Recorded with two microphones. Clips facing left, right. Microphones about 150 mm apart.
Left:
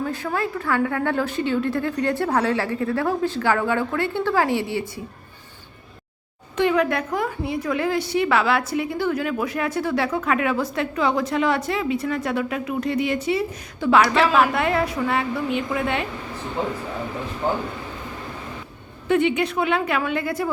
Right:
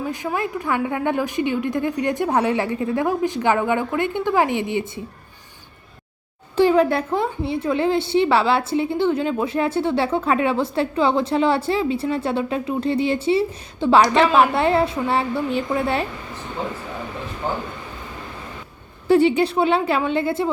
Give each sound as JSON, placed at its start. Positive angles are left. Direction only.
{"t": 0.0, "sound": "a woman's voice", "side_deg": -15}
{"t": 6.6, "sound": "a woman's voice", "side_deg": -30}
{"t": 14.1, "sound": "a woman's voice", "side_deg": 0}
{"t": 14.5, "sound": "a woman's voice", "side_deg": -30}
{"t": 19.0, "sound": "a woman's voice", "side_deg": -35}